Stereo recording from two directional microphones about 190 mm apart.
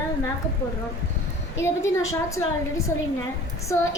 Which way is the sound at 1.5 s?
15° left (ahead or behind).